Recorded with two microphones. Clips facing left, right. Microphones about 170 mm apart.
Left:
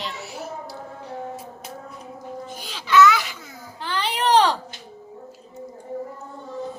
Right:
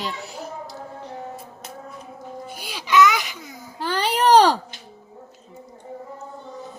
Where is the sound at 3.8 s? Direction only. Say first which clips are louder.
Right 4 dB; 40° right (ahead or behind).